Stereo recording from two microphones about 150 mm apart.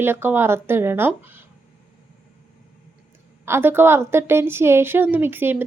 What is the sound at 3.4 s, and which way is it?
A woman's voice, 15° right (ahead or behind).